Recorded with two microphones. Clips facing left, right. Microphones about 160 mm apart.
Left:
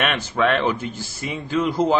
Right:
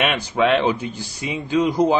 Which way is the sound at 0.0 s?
15° right (ahead or behind).